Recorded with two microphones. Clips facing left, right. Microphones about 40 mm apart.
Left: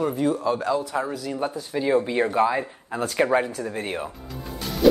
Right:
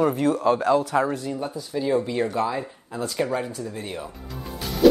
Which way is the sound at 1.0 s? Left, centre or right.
Right.